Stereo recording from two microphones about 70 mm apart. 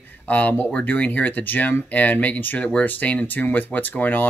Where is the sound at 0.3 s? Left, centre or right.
Left.